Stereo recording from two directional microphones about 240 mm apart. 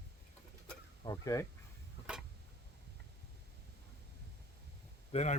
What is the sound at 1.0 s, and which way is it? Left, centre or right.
Speech, centre.